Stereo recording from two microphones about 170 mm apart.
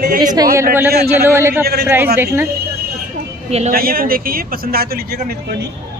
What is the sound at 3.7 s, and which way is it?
Speech, 60° right (ahead or behind).